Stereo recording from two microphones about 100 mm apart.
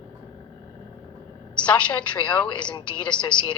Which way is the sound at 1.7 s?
10° left (ahead or behind).